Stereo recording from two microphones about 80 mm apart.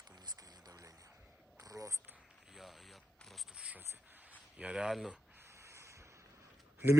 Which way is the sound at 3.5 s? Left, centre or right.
Centre.